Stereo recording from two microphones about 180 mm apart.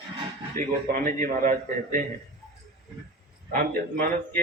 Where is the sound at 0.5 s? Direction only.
50° right (ahead or behind).